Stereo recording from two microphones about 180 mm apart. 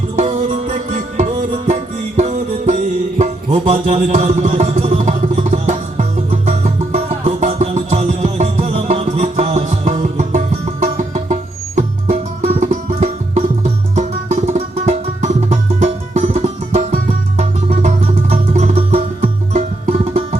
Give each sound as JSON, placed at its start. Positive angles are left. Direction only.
{"t": 0.2, "sound": "music", "side_deg": -40}